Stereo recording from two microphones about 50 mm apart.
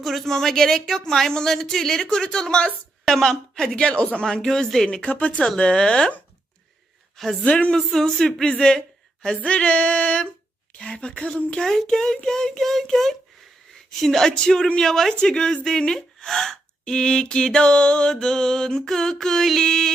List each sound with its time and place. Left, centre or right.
0.0 s speech: centre
4.3 s speech: centre
7.4 s a sound: left
7.8 s speech: centre
9.5 s a sound: left
10.8 s speech: centre